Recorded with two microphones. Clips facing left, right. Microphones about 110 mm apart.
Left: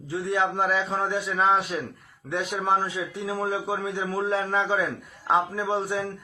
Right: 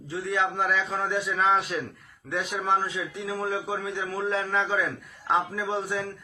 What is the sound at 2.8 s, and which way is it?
A man's voice, 15° left (ahead or behind).